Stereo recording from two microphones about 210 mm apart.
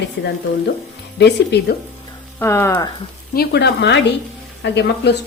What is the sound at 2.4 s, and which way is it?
Speech, 10° left (ahead or behind).